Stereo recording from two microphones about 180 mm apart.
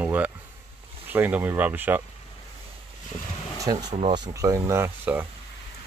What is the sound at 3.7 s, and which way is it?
Speech, 25° right (ahead or behind).